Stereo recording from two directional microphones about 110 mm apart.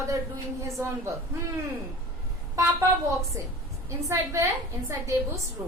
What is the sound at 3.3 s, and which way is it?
A woman's voice, 25° right (ahead or behind).